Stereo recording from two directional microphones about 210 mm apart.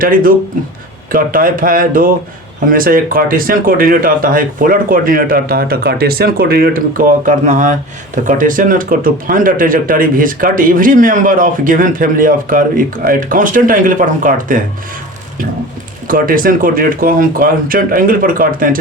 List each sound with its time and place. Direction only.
0.0 s speech: 40° right (ahead or behind)
16.0 s speech: 40° right (ahead or behind)